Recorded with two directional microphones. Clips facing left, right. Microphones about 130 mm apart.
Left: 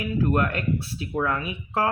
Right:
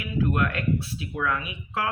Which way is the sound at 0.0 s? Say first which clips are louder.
Left 2 dB; 40° left (ahead or behind).